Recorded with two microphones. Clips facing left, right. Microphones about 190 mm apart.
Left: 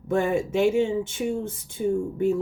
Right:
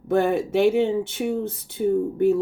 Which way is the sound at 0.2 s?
60° right (ahead or behind).